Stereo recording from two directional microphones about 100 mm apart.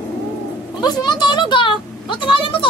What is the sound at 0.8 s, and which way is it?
A woman's voice, 45° left (ahead or behind).